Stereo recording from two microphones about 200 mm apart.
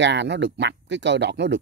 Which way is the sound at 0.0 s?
60° right (ahead or behind).